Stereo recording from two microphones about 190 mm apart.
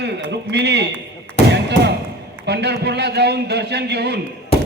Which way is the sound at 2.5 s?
60° right (ahead or behind).